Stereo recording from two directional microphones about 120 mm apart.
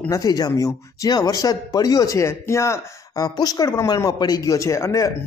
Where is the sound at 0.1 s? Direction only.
30° left (ahead or behind).